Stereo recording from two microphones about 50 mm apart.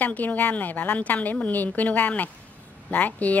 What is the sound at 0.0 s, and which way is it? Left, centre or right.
A woman's voice, left.